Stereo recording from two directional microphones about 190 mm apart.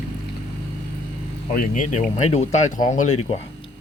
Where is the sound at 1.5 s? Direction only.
45° left (ahead or behind).